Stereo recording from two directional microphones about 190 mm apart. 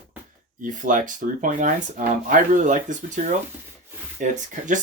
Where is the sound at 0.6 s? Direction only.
45° right (ahead or behind).